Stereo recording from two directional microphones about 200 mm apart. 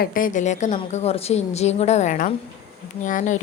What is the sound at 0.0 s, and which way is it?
A woman's voice, 45° left (ahead or behind).